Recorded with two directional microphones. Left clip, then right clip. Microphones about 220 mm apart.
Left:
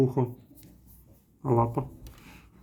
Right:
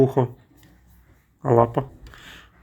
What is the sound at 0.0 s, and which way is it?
Speech, 15° right (ahead or behind).